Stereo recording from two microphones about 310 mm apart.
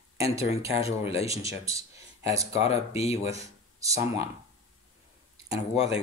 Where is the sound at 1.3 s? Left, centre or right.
Centre.